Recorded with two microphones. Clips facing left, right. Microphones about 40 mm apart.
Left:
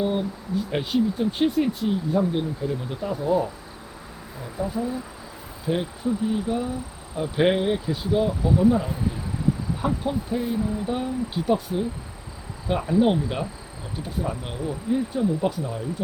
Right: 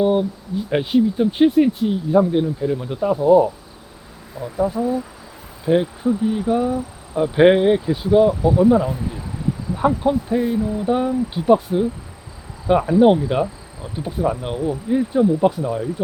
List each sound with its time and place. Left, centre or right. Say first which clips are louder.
0.0 s speech: right 7 dB; centre
5.6 s speech: right 8 dB; centre
9.7 s speech: right 8 dB; centre